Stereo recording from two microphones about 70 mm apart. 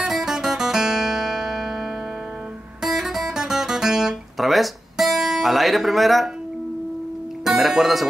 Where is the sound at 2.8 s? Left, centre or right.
Centre.